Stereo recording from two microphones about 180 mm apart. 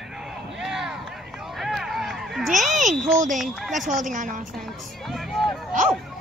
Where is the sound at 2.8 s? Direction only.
Centre (ahead or behind).